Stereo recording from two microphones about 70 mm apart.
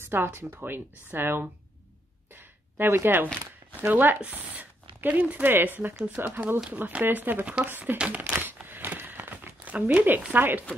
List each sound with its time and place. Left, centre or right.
0.0 s speech: right
2.3 s a sound: right
3.9 s speech: right
6.2 s speech: right
8.4 s crumpling: right